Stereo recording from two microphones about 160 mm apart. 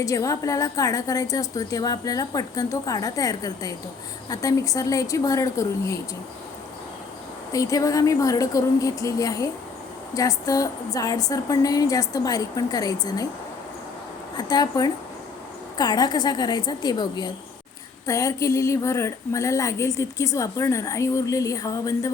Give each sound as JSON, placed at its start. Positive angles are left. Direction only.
{"t": 0.0, "sound": "speech", "side_deg": 20}
{"t": 7.5, "sound": "speech", "side_deg": 20}
{"t": 14.3, "sound": "speech", "side_deg": 25}